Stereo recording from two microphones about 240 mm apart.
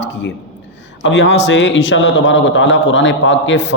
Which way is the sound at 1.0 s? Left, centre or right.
Left.